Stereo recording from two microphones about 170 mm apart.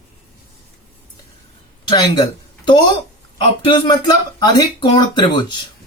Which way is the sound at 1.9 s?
25° left (ahead or behind).